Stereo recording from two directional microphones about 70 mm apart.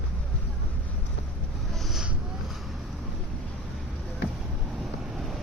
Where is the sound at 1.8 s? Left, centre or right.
Centre.